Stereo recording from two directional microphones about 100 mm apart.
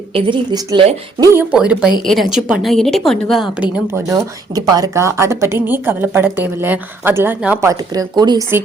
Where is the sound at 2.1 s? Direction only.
Centre (ahead or behind).